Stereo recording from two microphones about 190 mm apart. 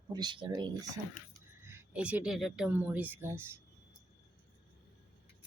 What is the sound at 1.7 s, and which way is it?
Speech, 5° right (ahead or behind).